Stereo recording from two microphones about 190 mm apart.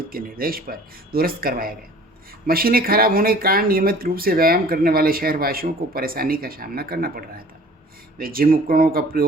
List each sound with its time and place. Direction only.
0.1 s speech: 50° right (ahead or behind)